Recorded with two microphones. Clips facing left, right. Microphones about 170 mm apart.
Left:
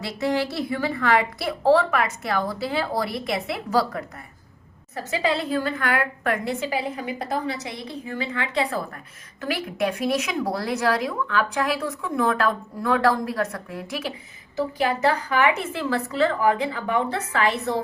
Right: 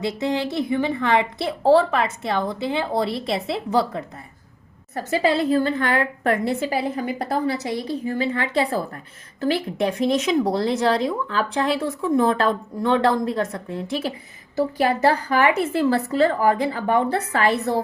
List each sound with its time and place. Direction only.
0.0 s speech: 20° right (ahead or behind)
4.9 s a woman's voice: 40° right (ahead or behind)
14.5 s a woman's voice: 35° right (ahead or behind)